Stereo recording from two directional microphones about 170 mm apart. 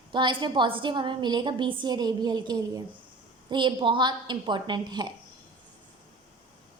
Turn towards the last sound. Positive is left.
turn(degrees=-25)  # may be behind; listen again after turning